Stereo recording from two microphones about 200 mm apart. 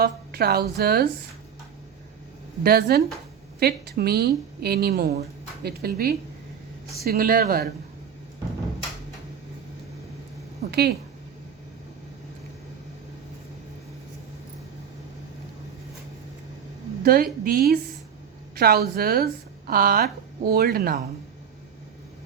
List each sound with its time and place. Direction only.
0.0 s a woman's voice: 50° right (ahead or behind)
2.6 s a woman's voice: 50° right (ahead or behind)
10.7 s speech: 55° right (ahead or behind)
17.0 s a woman's voice: 45° right (ahead or behind)